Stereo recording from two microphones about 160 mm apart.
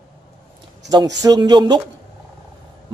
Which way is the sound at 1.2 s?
25° right (ahead or behind).